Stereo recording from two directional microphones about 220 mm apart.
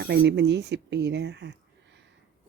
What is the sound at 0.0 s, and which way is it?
Speech, 50° right (ahead or behind).